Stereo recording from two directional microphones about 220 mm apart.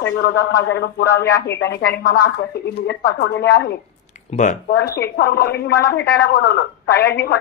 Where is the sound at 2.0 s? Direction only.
50° left (ahead or behind).